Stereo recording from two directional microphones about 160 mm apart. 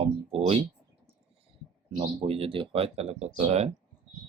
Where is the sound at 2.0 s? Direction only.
35° right (ahead or behind).